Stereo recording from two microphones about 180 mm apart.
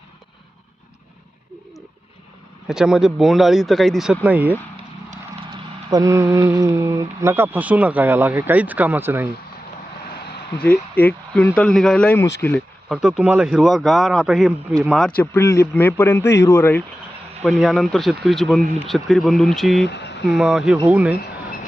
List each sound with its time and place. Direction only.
2.6 s speech: 5° right (ahead or behind)
5.9 s speech: 20° right (ahead or behind)
10.1 s vehicle: 60° left (ahead or behind)
10.6 s a man's voice: 10° left (ahead or behind)
12.9 s a man's voice: centre (ahead or behind); by 16.8 s 15° left (ahead or behind)
17.4 s speech: centre (ahead or behind)
19.8 s speech: 70° left (ahead or behind)
20.2 s speech: 5° right (ahead or behind)